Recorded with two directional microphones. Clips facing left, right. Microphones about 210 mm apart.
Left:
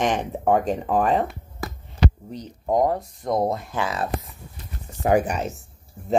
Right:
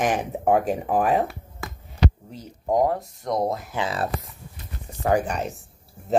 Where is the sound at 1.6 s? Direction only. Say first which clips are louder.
Left 4 dB; 35° left (ahead or behind).